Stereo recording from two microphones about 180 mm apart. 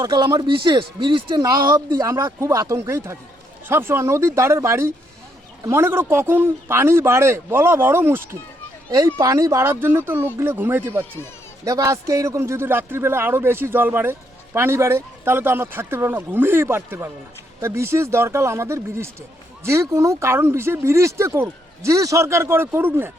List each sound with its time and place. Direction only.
0.0 s a man's voice: 20° right (ahead or behind)